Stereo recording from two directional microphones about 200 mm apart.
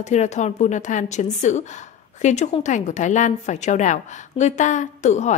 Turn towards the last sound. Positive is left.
turn(degrees=35)  # may be behind; listen again after turning